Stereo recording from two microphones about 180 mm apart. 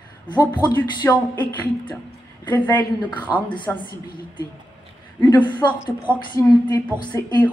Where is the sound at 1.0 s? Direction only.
15° left (ahead or behind).